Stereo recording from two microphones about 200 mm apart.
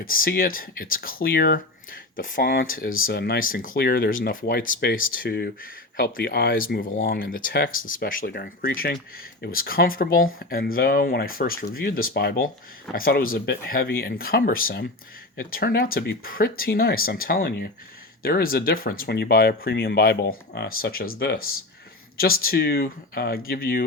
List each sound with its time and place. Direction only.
0.0 s speech: 45° left (ahead or behind)